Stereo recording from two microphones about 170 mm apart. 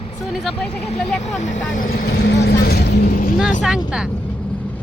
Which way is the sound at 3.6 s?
5° right (ahead or behind).